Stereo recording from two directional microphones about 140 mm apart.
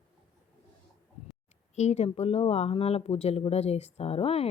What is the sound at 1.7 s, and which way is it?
Speech, 50° left (ahead or behind).